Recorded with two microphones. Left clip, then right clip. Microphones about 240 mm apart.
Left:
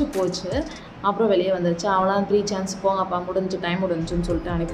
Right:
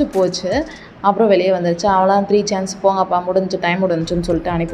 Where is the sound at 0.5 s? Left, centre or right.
Right.